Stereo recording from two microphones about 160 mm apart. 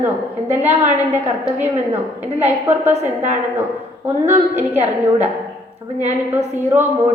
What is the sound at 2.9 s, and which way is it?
Speech, 45° right (ahead or behind).